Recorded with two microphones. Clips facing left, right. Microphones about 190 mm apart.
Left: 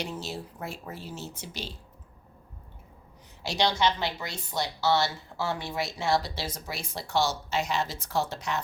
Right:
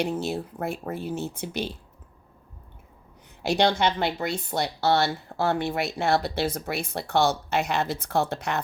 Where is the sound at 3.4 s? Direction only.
55° right (ahead or behind).